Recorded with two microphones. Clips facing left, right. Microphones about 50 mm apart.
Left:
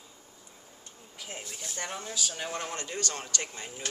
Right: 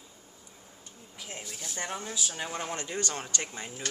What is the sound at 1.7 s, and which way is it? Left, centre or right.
Speech, centre.